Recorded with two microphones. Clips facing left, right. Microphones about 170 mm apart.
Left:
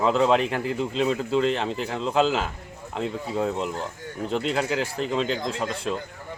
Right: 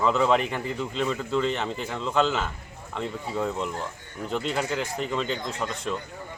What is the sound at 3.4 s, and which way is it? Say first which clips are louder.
Speech: left 2 dB; 35° left (ahead or behind).